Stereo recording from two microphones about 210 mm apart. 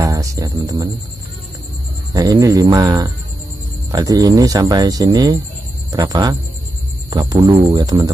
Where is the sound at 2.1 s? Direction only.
15° right (ahead or behind).